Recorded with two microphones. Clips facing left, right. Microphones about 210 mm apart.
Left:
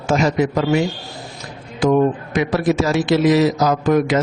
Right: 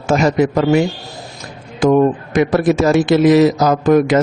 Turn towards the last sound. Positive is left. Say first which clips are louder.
# right 4 dB
turn(degrees=-50)  # may be behind; listen again after turning